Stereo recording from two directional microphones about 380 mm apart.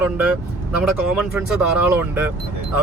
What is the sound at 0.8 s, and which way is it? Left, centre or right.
Speech, centre.